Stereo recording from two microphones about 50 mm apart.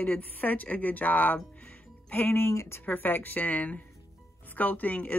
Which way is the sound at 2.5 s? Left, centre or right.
Left.